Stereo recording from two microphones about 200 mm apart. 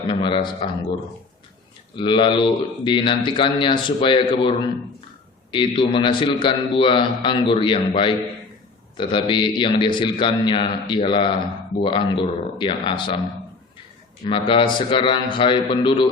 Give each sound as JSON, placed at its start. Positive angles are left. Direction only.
{"t": 0.2, "sound": "a man's voice", "side_deg": 25}
{"t": 2.0, "sound": "a man's voice", "side_deg": 25}
{"t": 14.3, "sound": "a man's voice", "side_deg": 25}